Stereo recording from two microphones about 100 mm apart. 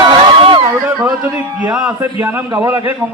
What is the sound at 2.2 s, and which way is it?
Speech, 20° right (ahead or behind).